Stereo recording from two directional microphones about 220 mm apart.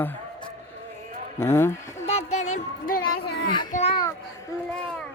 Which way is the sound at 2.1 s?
30° left (ahead or behind).